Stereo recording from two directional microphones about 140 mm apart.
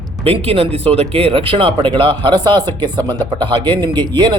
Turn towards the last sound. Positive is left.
turn(degrees=-35)  # may be behind; listen again after turning